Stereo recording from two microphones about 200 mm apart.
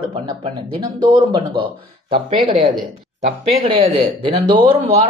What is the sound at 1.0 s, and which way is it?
Speech, 25° right (ahead or behind).